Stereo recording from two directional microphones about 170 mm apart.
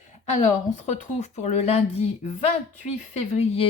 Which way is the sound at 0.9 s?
40° left (ahead or behind).